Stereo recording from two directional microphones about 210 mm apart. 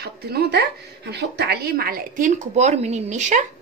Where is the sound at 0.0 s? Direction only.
50° right (ahead or behind).